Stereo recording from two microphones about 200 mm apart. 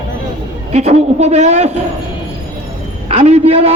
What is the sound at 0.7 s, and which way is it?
A man's voice, 30° right (ahead or behind).